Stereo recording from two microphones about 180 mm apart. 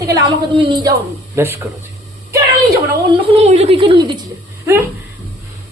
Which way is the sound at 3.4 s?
35° right (ahead or behind).